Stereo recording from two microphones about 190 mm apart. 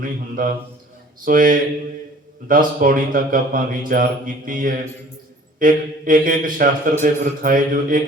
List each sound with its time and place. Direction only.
0.0 s a man's voice: 45° right (ahead or behind)